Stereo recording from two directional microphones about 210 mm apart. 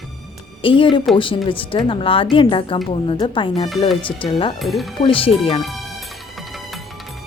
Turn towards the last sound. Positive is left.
turn(degrees=25)  # may be behind; listen again after turning